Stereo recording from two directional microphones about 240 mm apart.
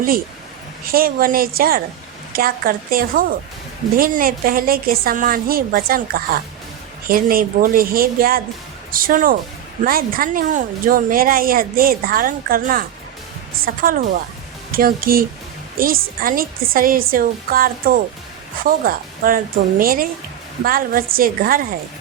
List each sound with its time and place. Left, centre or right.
0.9 s a woman's voice: right